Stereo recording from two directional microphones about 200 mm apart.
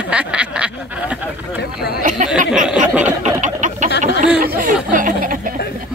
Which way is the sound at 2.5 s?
5° right (ahead or behind).